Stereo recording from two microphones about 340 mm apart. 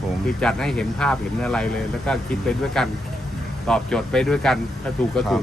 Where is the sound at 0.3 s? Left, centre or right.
Centre.